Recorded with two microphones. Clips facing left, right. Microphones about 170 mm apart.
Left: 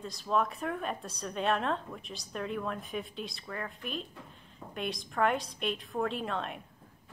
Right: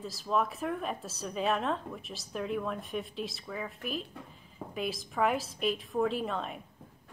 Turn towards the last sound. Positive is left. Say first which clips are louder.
# right 1 dB
turn(degrees=0)  # may be behind; listen again after turning